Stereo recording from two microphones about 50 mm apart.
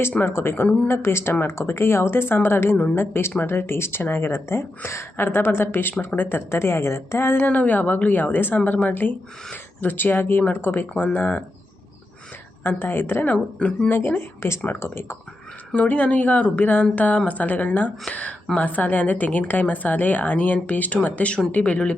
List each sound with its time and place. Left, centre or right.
0.2 s a woman's voice: left
1.5 s a woman's voice: left
5.1 s a woman's voice: left
7.4 s a woman's voice: left
12.6 s a woman's voice: left
13.2 s speech: left
13.9 s a woman's voice: left
15.7 s speech: left